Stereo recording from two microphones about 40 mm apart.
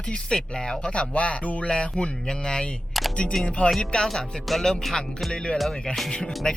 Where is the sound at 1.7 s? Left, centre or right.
Left.